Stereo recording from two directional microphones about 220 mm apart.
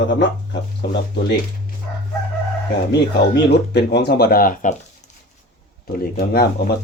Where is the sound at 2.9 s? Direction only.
50° left (ahead or behind).